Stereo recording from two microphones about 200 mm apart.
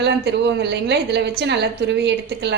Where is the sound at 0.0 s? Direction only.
60° right (ahead or behind).